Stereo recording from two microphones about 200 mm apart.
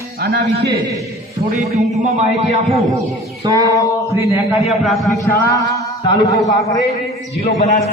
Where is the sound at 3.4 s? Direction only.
15° right (ahead or behind).